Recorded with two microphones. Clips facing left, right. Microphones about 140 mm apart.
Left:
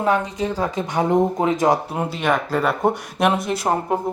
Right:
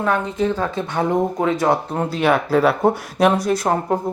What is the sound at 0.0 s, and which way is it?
Speech, 15° left (ahead or behind).